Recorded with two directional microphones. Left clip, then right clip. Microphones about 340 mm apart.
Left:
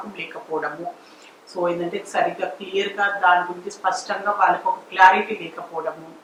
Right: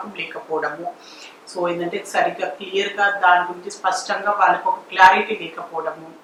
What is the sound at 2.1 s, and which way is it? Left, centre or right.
A woman's voice, centre.